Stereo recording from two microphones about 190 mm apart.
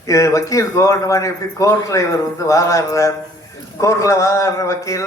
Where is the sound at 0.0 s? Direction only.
15° left (ahead or behind).